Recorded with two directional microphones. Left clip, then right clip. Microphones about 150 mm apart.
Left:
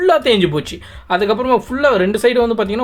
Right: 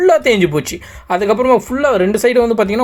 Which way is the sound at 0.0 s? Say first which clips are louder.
Right 2 dB; 15° right (ahead or behind).